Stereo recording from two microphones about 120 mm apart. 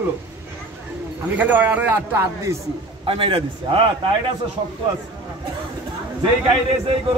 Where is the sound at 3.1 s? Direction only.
50° right (ahead or behind).